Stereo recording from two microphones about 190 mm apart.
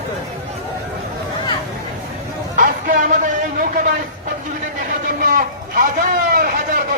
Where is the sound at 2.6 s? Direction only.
45° right (ahead or behind).